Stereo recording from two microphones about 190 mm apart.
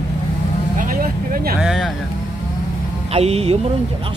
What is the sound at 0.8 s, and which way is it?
Vehicle, 45° right (ahead or behind).